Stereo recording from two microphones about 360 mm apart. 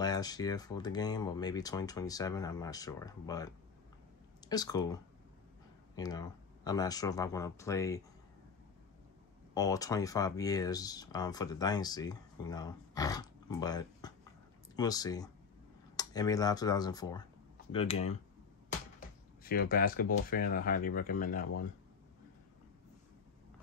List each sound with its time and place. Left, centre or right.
0.0 s speech: centre
9.5 s speech: centre
19.4 s speech: left